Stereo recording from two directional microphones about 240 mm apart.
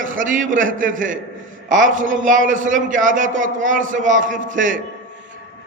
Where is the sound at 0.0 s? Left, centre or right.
Right.